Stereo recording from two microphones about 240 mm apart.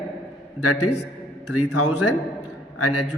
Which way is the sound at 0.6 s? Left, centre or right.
Left.